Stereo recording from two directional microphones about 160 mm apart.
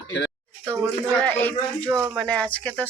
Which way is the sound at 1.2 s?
10° left (ahead or behind).